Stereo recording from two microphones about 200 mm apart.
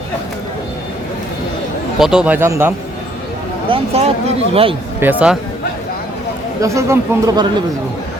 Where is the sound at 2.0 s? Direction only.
5° right (ahead or behind).